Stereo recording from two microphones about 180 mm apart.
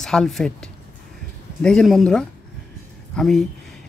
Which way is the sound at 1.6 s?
5° left (ahead or behind).